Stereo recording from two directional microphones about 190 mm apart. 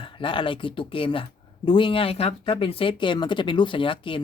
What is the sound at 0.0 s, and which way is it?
Speech, 25° left (ahead or behind).